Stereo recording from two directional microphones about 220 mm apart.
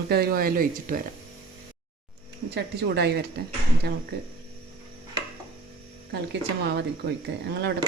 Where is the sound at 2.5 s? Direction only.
50° right (ahead or behind).